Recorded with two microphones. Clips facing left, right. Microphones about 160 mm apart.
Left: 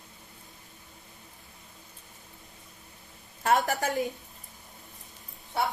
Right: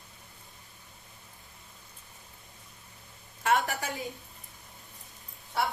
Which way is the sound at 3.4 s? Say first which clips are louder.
Left 2 dB; 40° left (ahead or behind).